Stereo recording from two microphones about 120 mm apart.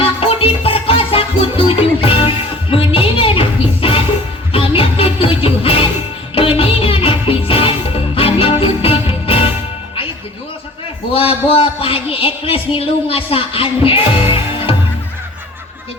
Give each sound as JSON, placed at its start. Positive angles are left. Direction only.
{"t": 0.0, "sound": "music", "side_deg": 50}
{"t": 11.1, "sound": "speech", "side_deg": 50}